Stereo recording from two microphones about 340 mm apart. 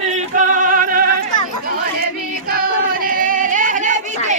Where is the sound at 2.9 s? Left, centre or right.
Right.